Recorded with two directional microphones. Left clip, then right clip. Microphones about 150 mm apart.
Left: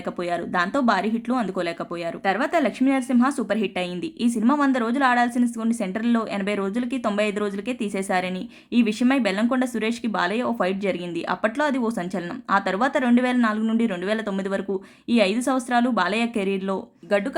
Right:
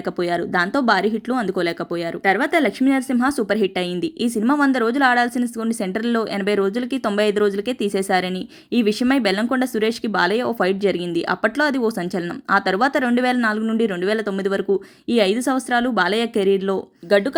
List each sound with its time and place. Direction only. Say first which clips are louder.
0.2 s speech: right 4 dB; 30° right (ahead or behind)
17.1 s speech: right 6 dB; 40° right (ahead or behind)